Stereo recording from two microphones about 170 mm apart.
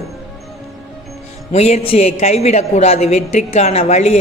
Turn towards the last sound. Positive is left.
turn(degrees=40)  # may be behind; listen again after turning